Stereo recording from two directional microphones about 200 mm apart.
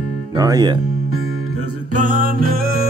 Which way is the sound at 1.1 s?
90° right.